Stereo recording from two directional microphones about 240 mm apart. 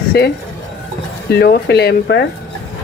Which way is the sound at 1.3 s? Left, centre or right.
Left.